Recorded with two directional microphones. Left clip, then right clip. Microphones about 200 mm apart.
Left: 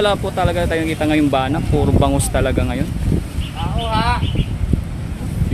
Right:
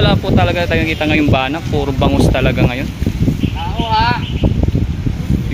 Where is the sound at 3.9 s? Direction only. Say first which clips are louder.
Right 5 dB; 40° left (ahead or behind).